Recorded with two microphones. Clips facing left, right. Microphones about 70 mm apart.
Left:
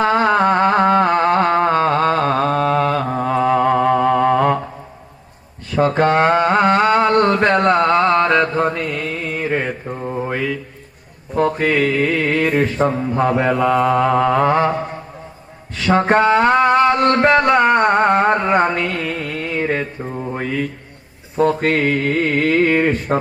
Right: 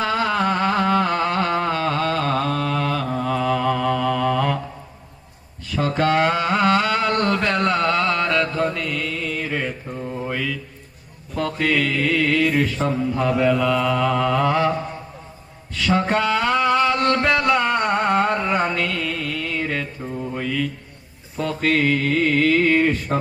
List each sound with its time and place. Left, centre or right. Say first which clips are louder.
0.0 s a sound: left 6 dB; left
5.7 s mantra: left 5 dB; left
18.4 s mantra: left 5 dB; left